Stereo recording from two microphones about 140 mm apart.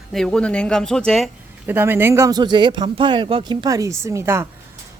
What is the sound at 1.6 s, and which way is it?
Speech, 15° right (ahead or behind).